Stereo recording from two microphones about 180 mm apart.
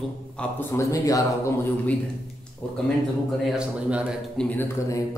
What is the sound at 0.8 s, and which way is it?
A man's voice, 15° left (ahead or behind).